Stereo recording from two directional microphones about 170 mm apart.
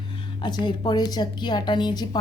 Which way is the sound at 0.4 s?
25° left (ahead or behind).